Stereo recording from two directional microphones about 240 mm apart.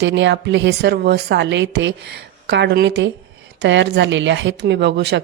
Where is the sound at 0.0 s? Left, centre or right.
Right.